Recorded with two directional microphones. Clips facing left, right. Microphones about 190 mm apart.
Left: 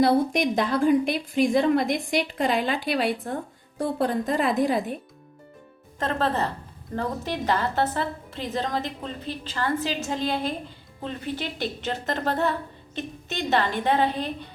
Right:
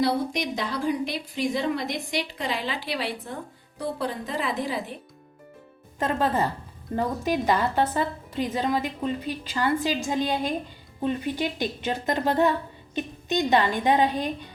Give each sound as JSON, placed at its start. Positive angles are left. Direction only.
{"t": 0.0, "sound": "a woman's voice", "side_deg": 55}
{"t": 6.0, "sound": "a woman's voice", "side_deg": -10}